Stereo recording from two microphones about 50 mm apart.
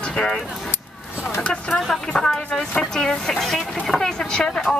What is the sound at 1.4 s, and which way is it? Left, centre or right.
Speech, left.